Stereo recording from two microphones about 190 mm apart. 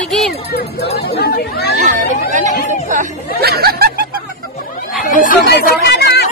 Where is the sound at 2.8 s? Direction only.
50° right (ahead or behind).